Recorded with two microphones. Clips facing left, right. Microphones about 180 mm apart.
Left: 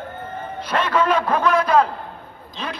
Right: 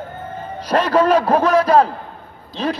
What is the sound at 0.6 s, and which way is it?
A man's voice, 40° right (ahead or behind).